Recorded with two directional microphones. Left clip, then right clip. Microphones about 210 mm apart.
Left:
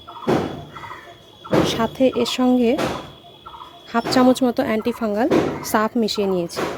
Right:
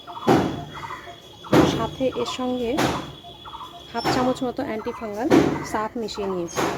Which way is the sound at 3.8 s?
55° left (ahead or behind).